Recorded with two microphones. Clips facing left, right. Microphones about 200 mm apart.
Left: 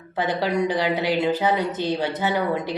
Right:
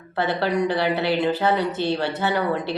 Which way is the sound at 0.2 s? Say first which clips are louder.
Right 1 dB; 15° left (ahead or behind).